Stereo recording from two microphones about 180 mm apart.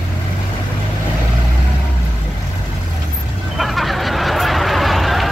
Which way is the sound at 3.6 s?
Centre (ahead or behind).